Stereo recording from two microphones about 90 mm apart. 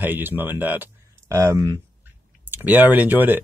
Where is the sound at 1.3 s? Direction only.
35° right (ahead or behind).